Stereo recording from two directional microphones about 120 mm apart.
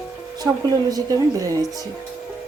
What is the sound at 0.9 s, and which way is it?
Speech, 30° right (ahead or behind).